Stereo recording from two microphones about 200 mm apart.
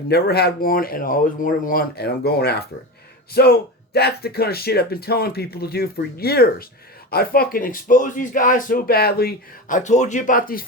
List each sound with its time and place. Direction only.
0.1 s speech: 55° left (ahead or behind)